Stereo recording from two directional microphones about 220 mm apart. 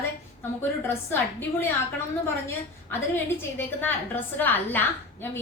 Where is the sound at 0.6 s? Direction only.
10° left (ahead or behind).